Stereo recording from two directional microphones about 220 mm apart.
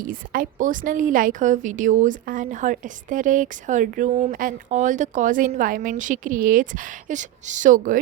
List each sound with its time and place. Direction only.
0.0 s a woman's voice: 40° right (ahead or behind)